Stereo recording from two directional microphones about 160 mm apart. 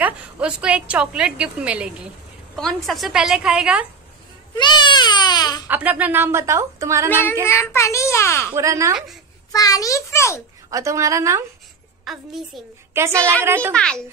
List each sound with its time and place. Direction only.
0.0 s a woman's voice: 5° right (ahead or behind)
4.6 s baby cry: 30° left (ahead or behind)
5.7 s a woman's voice: 10° right (ahead or behind)
7.4 s a child's voice: 15° left (ahead or behind)
8.5 s a woman's voice: 20° right (ahead or behind)
9.5 s baby cry: 20° left (ahead or behind)
10.7 s a woman's voice: 20° right (ahead or behind)
12.0 s a woman's voice: centre (ahead or behind)
12.9 s a woman's voice: 15° right (ahead or behind)